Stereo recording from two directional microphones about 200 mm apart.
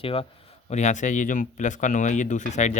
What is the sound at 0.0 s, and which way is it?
Speech, 25° left (ahead or behind).